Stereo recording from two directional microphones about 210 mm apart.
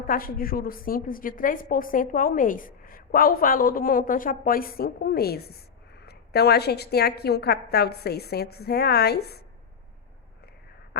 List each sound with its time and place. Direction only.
0.0 s a woman's voice: 45° left (ahead or behind)